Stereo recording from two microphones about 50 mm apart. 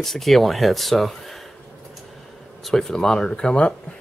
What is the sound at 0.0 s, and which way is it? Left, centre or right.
Speech, centre.